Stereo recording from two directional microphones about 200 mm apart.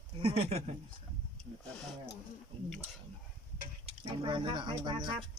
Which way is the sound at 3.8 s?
30° right (ahead or behind).